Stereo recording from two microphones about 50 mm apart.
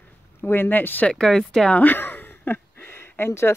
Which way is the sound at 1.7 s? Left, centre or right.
Left.